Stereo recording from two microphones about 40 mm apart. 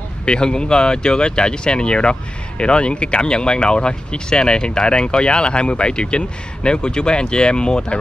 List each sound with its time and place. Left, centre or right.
0.2 s speech: left